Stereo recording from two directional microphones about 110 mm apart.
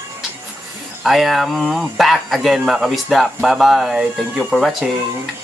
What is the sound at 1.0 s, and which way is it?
Speech, centre (ahead or behind).